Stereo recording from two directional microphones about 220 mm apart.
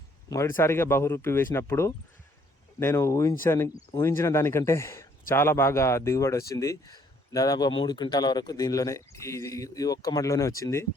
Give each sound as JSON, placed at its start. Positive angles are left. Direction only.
{"t": 0.3, "sound": "speech", "side_deg": 10}